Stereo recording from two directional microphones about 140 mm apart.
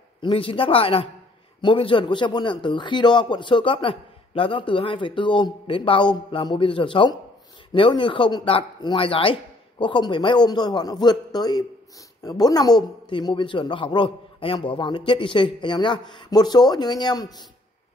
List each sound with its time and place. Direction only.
0.2 s a man's voice: 40° left (ahead or behind)